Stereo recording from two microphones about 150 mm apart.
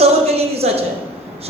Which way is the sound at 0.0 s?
45° right (ahead or behind).